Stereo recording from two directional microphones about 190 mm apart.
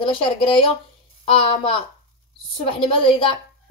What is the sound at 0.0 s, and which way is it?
A woman's voice, 30° left (ahead or behind).